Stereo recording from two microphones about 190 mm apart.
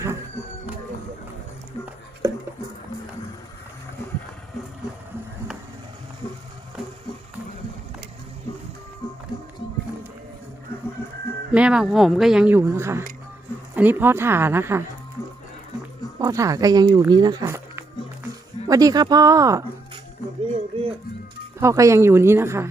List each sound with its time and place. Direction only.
2.2 s a sound: 15° right (ahead or behind)
11.5 s a woman's voice: 5° right (ahead or behind)
16.2 s speech: 15° right (ahead or behind)
17.0 s music: 20° right (ahead or behind)
18.7 s speech: 20° right (ahead or behind)
20.7 s music: 30° right (ahead or behind)
21.6 s a woman's voice: 15° right (ahead or behind)